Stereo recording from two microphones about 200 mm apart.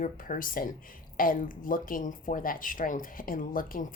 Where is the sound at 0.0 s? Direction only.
40° left (ahead or behind).